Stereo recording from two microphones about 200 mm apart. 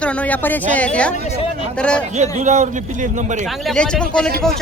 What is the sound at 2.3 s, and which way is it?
A man's voice, 35° right (ahead or behind).